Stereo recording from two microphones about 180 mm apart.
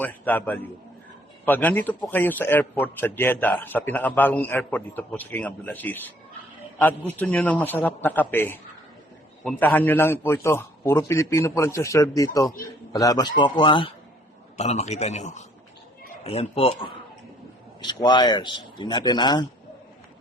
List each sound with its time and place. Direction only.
0.0 s a man's voice: 10° left (ahead or behind); by 13.9 s 25° left (ahead or behind)
14.6 s a man's voice: 40° left (ahead or behind); by 19.5 s 25° left (ahead or behind)